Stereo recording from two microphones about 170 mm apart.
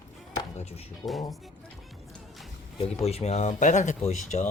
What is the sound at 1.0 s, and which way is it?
Speech, 40° left (ahead or behind).